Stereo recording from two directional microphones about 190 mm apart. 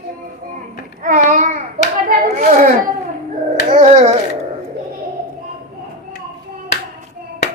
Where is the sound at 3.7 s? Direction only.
35° right (ahead or behind).